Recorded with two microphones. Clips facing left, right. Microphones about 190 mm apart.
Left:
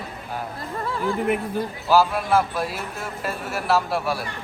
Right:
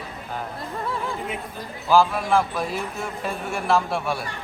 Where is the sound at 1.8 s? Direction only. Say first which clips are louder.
Right 1 dB; 5° left (ahead or behind).